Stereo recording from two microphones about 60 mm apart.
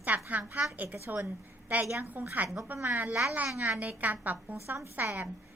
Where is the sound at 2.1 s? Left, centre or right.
Right.